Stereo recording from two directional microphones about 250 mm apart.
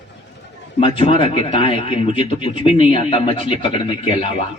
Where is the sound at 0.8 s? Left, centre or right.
Left.